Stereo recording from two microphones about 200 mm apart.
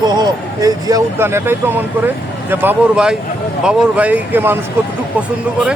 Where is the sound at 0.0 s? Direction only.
20° right (ahead or behind).